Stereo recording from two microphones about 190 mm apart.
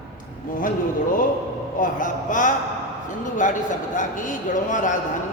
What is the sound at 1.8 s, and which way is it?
A man's voice, 45° left (ahead or behind).